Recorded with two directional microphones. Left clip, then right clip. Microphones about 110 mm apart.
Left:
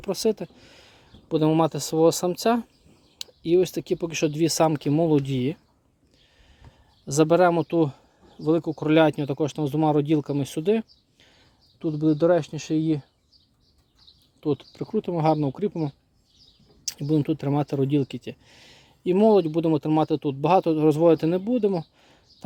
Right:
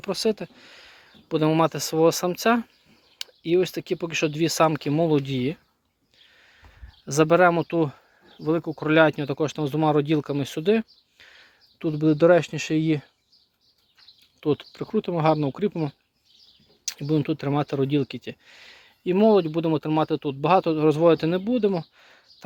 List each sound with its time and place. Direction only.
0.0 s speech: 55° left (ahead or behind)
7.0 s speech: 30° left (ahead or behind); by 7.9 s 50° left (ahead or behind)
8.3 s speech: 65° left (ahead or behind)
8.8 s speech: 50° left (ahead or behind); by 11.3 s 30° left (ahead or behind)
11.8 s speech: centre (ahead or behind)
14.4 s speech: 10° left (ahead or behind)
14.7 s speech: 25° left (ahead or behind)
16.8 s speech: 35° left (ahead or behind)